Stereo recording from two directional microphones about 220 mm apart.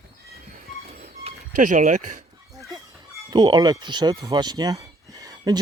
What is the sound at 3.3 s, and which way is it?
Speech, 20° right (ahead or behind).